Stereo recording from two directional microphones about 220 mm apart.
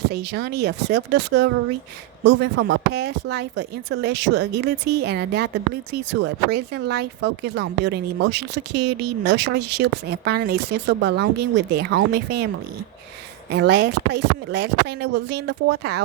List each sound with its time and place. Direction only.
0.1 s speech: 50° right (ahead or behind)
13.5 s speech: 50° right (ahead or behind)